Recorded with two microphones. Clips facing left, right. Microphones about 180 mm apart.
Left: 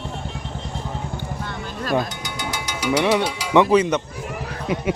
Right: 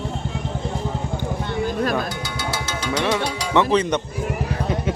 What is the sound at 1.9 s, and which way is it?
Music, 15° left (ahead or behind).